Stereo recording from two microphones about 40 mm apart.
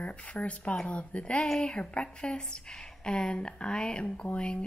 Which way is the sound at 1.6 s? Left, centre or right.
Left.